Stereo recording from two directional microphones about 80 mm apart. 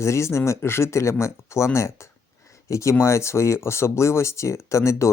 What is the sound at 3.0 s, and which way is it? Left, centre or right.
Speech, left.